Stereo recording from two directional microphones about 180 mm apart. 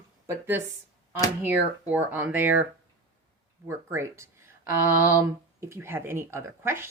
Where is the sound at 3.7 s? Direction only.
15° right (ahead or behind).